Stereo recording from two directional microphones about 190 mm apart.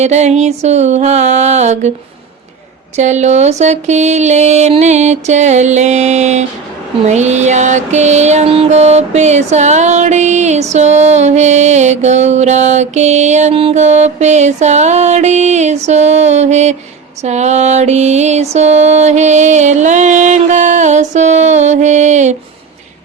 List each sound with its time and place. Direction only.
0.0 s mantra: 35° right (ahead or behind)
2.9 s mantra: 35° right (ahead or behind)